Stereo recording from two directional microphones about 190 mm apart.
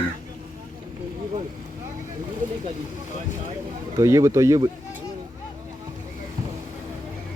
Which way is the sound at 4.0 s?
15° right (ahead or behind).